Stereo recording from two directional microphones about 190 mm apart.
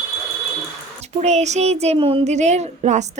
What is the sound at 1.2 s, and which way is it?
Speech, 35° right (ahead or behind).